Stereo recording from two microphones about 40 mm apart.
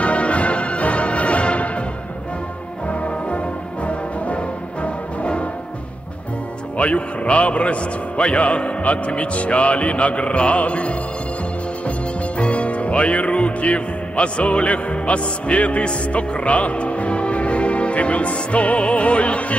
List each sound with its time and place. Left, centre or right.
0.0 s music: left
2.9 s music: left
6.8 s a man's voice: left
12.4 s speech: left